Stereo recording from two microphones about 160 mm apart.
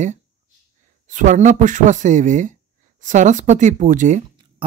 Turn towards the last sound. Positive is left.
turn(degrees=-50)  # may be behind; listen again after turning